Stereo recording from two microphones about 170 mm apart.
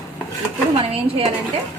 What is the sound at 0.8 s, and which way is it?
Speech, 35° right (ahead or behind).